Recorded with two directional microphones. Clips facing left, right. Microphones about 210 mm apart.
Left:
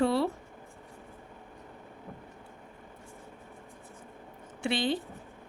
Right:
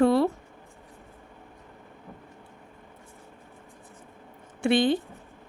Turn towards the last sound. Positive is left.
turn(degrees=-50)  # may be behind; listen again after turning